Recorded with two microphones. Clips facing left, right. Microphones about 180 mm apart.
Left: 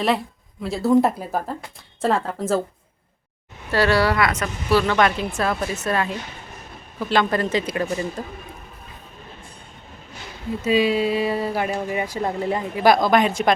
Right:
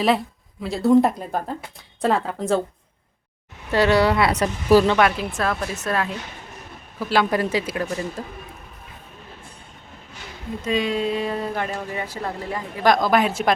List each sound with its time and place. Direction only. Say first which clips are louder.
0.6 s a woman's voice: right 1 dB; centre (ahead or behind)
3.7 s speech: right 1 dB; 20° right (ahead or behind)
4.3 s speech: right 5 dB; 35° right (ahead or behind)
4.9 s a woman's voice: even; 5° right (ahead or behind)
10.6 s a woman's voice: left 4 dB; 5° left (ahead or behind); by 12.8 s 25° left (ahead or behind)
12.8 s a woman's voice: left 1 dB; 5° left (ahead or behind)